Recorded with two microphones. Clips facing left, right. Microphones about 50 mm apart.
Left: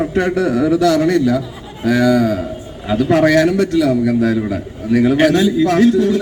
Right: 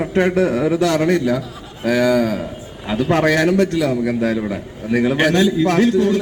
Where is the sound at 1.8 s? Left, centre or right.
Centre.